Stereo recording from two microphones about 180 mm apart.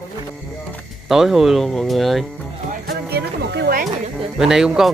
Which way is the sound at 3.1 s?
70° right (ahead or behind).